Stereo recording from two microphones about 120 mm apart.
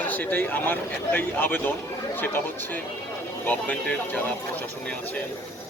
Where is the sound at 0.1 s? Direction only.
15° left (ahead or behind).